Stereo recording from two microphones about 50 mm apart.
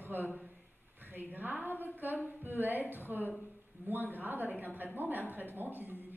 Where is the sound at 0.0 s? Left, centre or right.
Right.